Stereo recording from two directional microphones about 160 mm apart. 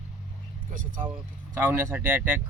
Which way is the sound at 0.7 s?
55° right (ahead or behind).